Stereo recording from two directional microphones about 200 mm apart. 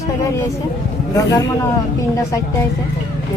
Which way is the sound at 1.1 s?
15° left (ahead or behind).